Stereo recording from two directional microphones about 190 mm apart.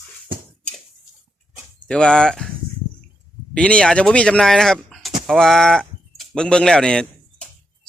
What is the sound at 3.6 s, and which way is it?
Speech, 5° left (ahead or behind).